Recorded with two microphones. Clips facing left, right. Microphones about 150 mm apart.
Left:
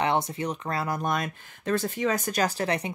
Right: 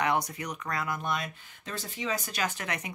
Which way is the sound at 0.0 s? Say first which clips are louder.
Left 3 dB; 30° left (ahead or behind).